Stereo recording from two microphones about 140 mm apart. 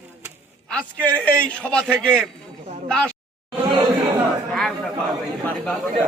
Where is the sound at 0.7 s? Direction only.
10° left (ahead or behind).